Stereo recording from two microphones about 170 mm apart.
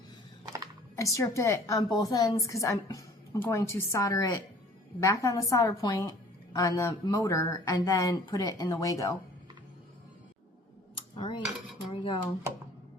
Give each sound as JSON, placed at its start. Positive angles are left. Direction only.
{"t": 0.9, "sound": "a woman's voice", "side_deg": 20}
{"t": 11.1, "sound": "cutlery", "side_deg": 30}
{"t": 11.9, "sound": "a woman's voice", "side_deg": 30}